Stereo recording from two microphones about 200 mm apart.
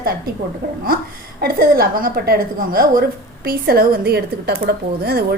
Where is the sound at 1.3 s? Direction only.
50° right (ahead or behind).